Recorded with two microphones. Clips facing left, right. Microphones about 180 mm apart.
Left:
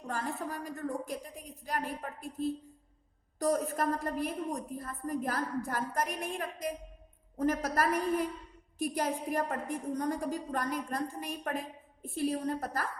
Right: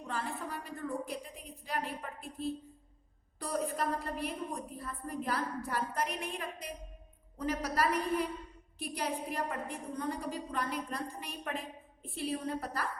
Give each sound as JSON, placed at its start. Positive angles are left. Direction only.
{"t": 0.1, "sound": "a woman's voice", "side_deg": 45}